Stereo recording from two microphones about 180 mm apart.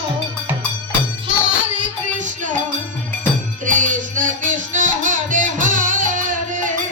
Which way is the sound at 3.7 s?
45° right (ahead or behind).